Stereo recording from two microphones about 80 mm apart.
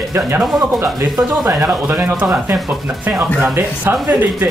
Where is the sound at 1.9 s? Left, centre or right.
Right.